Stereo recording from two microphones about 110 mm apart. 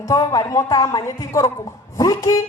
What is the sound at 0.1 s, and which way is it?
A woman's voice, 35° left (ahead or behind).